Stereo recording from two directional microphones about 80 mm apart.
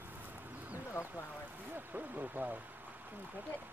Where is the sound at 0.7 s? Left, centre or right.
Left.